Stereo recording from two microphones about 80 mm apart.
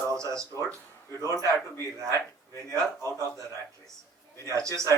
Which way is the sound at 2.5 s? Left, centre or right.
Left.